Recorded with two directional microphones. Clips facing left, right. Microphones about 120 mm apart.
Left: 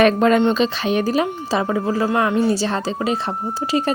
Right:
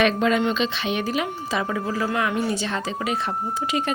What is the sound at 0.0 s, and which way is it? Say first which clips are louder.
Speech: left 6 dB; 45° left (ahead or behind).